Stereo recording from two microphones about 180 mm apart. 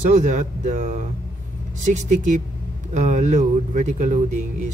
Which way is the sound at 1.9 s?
45° right (ahead or behind).